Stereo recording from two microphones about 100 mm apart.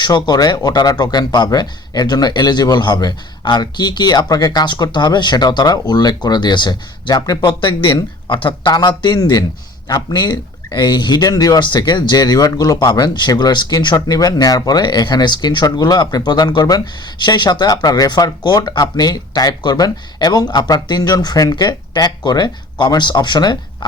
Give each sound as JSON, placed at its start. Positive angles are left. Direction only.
{"t": 0.0, "sound": "speech", "side_deg": 40}